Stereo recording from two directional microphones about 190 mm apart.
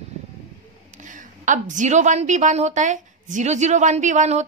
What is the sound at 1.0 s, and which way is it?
A woman's voice, 40° right (ahead or behind).